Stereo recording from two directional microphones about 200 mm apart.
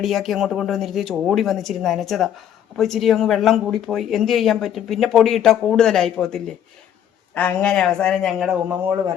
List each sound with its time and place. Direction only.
0.0 s speech: centre (ahead or behind)